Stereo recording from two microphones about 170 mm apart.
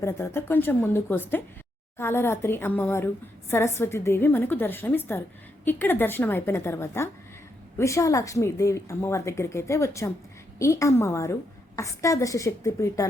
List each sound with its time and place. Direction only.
0.0 s a woman's voice: 15° left (ahead or behind)